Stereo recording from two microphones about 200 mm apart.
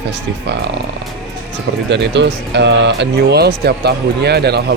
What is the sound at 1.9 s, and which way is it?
Speech, 60° right (ahead or behind).